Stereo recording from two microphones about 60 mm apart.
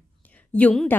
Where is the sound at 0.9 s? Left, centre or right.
Left.